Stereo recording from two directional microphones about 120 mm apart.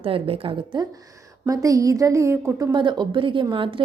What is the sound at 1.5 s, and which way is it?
A woman's voice, 30° right (ahead or behind).